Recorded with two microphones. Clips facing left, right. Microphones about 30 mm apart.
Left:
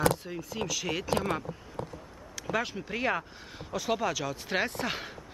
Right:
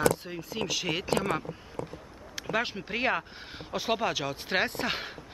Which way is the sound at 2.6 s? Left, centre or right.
Right.